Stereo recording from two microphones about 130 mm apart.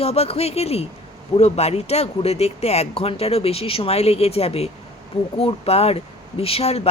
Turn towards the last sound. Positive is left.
turn(degrees=50)  # may be behind; listen again after turning